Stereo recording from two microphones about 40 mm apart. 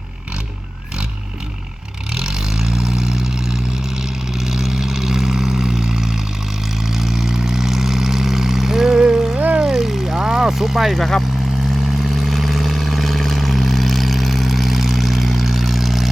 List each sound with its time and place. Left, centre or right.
2.1 s vehicle: centre
9.0 s music: right
9.6 s a sound: centre
10.1 s vehicle: centre
10.5 s vehicle: centre
10.9 s speech: centre
12.0 s vehicle: centre